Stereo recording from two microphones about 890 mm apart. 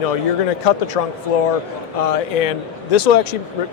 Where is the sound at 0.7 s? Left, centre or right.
Left.